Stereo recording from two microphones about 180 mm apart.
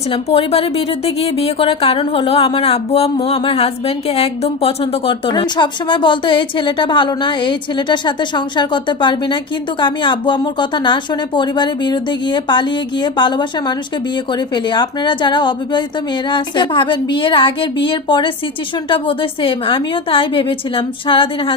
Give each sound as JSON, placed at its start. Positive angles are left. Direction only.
{"t": 0.1, "sound": "a woman's voice", "side_deg": 30}